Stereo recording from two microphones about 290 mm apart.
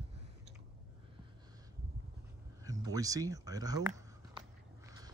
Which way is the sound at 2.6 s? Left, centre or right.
Centre.